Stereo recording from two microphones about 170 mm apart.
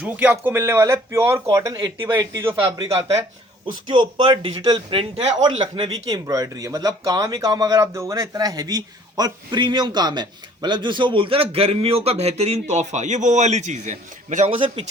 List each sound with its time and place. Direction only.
0.0 s a man's voice: 10° right (ahead or behind); by 14.8 s 30° right (ahead or behind)